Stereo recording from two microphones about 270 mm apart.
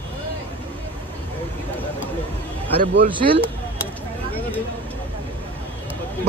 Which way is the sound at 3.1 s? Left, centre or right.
Centre.